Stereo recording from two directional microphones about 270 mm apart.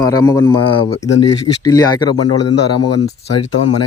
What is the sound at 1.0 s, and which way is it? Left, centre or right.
Speech, left.